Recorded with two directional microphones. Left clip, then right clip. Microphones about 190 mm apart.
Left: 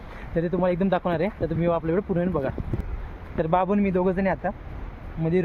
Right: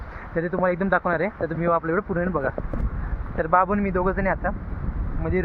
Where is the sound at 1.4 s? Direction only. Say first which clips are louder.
Right 2 dB; 10° left (ahead or behind).